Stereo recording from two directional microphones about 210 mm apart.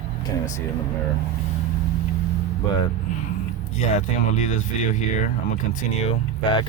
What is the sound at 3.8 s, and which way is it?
Speech, 35° left (ahead or behind).